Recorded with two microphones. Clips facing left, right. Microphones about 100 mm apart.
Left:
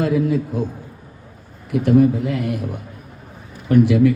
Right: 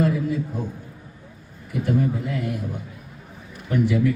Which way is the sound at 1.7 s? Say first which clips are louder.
Left 8 dB; 90° left.